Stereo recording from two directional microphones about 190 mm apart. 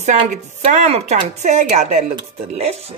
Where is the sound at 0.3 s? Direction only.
40° right (ahead or behind).